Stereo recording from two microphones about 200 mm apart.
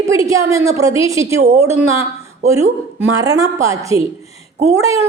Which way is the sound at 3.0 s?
15° right (ahead or behind).